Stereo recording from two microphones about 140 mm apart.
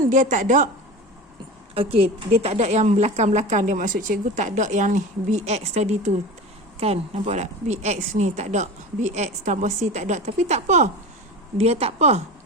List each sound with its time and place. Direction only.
0.0 s a woman's voice: 65° right (ahead or behind)
1.7 s a woman's voice: 40° right (ahead or behind)